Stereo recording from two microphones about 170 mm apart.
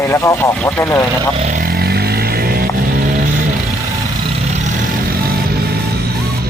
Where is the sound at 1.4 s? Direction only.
50° right (ahead or behind).